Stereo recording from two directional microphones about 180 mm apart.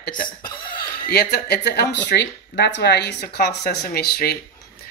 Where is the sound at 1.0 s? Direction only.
65° left (ahead or behind).